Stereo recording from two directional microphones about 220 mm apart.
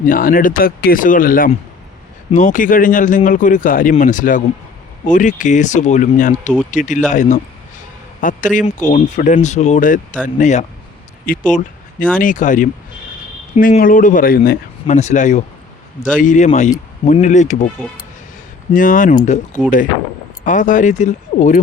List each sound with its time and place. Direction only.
0.0 s speech: 40° left (ahead or behind)
18.7 s speech: 35° left (ahead or behind)